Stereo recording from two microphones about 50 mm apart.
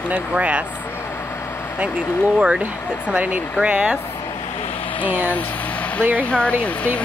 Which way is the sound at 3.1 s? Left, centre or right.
Right.